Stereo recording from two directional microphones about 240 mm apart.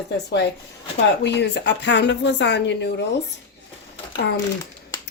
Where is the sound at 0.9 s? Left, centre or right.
Left.